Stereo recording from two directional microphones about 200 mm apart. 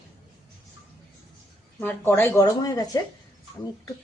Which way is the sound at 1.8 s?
10° left (ahead or behind).